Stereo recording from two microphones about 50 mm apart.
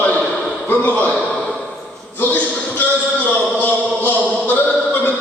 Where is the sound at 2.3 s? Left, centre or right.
Left.